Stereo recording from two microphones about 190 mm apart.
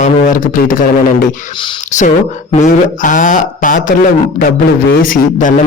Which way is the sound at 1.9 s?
40° left (ahead or behind).